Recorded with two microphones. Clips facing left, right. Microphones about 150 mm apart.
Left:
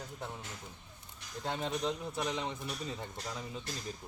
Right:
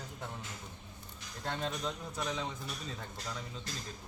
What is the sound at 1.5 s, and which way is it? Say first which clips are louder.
Speech: left 2 dB; 15° left (ahead or behind).